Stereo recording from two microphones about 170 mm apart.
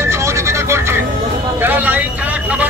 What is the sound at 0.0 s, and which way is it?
Vehicle, 15° right (ahead or behind).